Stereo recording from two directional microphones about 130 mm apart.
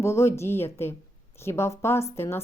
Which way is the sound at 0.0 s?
20° left (ahead or behind).